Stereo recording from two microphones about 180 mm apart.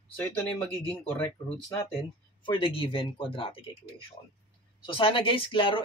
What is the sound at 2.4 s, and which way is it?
Speech, 30° left (ahead or behind).